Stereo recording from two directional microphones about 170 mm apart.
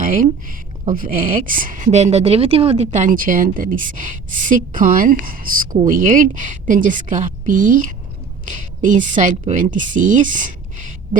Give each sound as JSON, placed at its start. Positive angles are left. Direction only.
{"t": 0.0, "sound": "a woman's voice", "side_deg": -50}